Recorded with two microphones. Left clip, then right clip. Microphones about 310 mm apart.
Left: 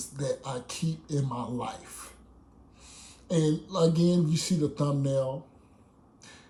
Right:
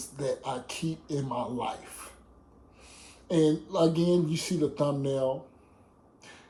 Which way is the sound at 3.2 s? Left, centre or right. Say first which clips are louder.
Right 3 dB; left.